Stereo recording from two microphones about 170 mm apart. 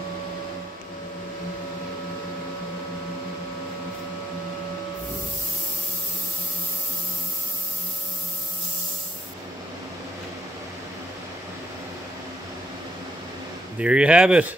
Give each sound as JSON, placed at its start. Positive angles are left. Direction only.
{"t": 13.7, "sound": "speech", "side_deg": -5}